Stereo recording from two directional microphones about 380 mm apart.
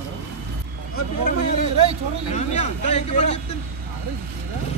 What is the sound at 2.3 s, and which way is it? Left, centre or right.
Speech, centre.